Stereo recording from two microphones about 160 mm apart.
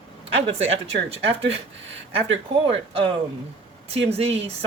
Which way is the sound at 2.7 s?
40° right (ahead or behind).